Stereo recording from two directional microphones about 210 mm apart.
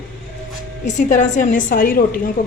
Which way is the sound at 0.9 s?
35° left (ahead or behind).